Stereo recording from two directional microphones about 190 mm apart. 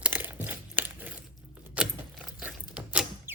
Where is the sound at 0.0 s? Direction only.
10° right (ahead or behind).